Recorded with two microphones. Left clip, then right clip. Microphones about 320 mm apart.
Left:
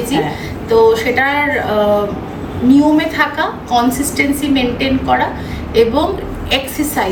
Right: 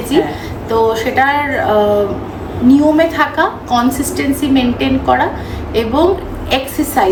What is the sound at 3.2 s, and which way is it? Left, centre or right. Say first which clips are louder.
A woman's voice: right 2 dB; centre.